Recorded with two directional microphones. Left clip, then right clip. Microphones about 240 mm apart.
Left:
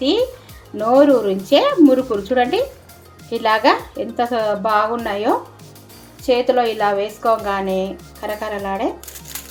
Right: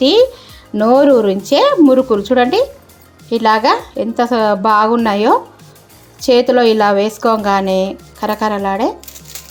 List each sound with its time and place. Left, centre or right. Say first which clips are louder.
0.0 s a woman's voice: right 8 dB; right